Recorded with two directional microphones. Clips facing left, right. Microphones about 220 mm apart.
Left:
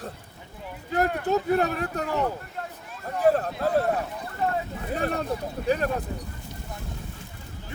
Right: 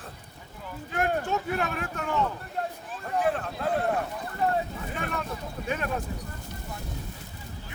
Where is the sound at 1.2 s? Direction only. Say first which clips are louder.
Left 6 dB; 35° left (ahead or behind).